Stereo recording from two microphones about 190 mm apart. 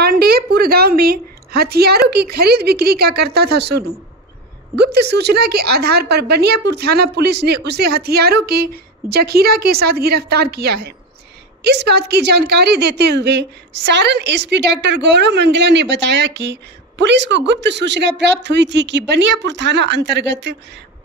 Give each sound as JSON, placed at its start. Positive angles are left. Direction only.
{"t": 0.0, "sound": "a woman's voice", "side_deg": -55}